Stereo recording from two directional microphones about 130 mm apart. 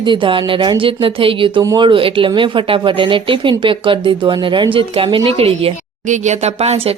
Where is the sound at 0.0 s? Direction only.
40° right (ahead or behind).